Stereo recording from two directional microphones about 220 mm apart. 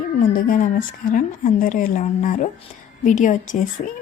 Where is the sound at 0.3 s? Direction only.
40° left (ahead or behind).